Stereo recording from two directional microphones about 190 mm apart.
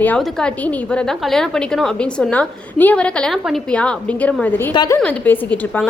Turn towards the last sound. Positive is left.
turn(degrees=5)  # may be behind; listen again after turning